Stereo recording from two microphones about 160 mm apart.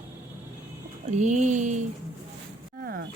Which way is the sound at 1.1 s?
45° right (ahead or behind).